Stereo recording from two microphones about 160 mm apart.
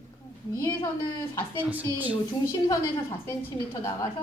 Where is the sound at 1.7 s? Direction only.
10° right (ahead or behind).